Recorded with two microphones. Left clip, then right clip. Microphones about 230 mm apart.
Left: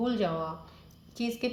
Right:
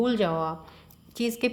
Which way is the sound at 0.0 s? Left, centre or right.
Right.